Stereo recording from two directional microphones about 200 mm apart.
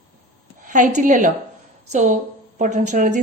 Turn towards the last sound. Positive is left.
turn(degrees=-40)  # may be behind; listen again after turning